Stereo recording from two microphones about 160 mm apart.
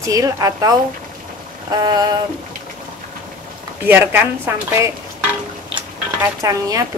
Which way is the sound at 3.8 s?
15° right (ahead or behind).